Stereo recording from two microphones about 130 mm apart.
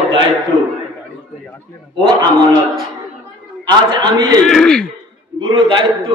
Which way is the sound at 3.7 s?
35° right (ahead or behind).